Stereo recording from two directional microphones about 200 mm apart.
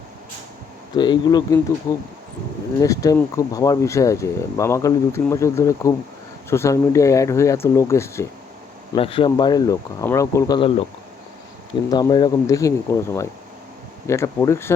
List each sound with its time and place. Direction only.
0.9 s speech: 20° left (ahead or behind)
9.0 s speech: 25° left (ahead or behind)
11.9 s speech: 20° left (ahead or behind)
14.1 s speech: 15° left (ahead or behind)